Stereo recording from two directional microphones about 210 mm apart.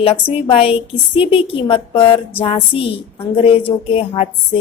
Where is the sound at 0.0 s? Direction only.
30° left (ahead or behind).